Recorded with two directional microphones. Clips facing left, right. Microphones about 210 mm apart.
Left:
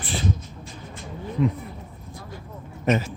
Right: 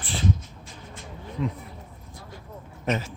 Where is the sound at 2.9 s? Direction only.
5° left (ahead or behind).